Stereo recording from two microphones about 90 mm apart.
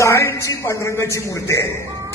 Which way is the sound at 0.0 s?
30° left (ahead or behind).